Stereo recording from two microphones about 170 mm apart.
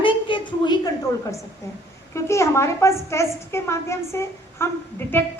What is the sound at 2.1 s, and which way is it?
A woman's voice, 15° left (ahead or behind).